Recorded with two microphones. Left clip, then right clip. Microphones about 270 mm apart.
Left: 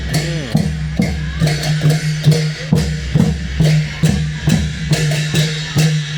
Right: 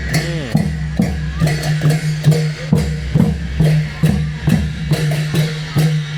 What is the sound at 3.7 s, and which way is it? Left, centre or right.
Music, centre.